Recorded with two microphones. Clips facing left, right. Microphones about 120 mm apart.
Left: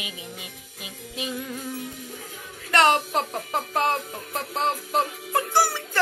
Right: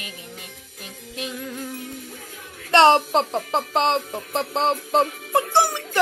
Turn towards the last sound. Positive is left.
turn(degrees=-20)  # may be behind; listen again after turning